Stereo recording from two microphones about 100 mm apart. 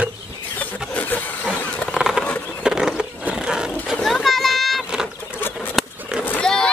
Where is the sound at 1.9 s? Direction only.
5° right (ahead or behind).